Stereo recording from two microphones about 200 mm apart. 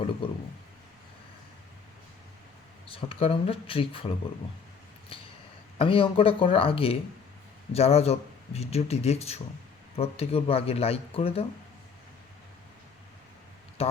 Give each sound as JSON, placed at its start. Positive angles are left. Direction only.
{"t": 0.2, "sound": "speech", "side_deg": 25}
{"t": 2.9, "sound": "speech", "side_deg": 25}
{"t": 5.7, "sound": "speech", "side_deg": 25}
{"t": 13.8, "sound": "speech", "side_deg": 30}